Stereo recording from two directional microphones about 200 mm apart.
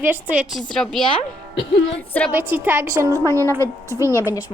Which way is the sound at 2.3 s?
10° right (ahead or behind).